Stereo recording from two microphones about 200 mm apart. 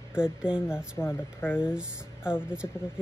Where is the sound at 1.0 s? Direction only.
10° left (ahead or behind).